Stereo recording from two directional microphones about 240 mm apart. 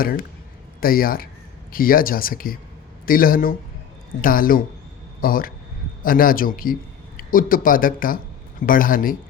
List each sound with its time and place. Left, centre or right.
0.0 s speech: left